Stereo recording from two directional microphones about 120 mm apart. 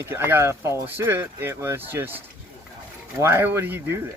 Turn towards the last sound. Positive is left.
turn(degrees=-20)  # may be behind; listen again after turning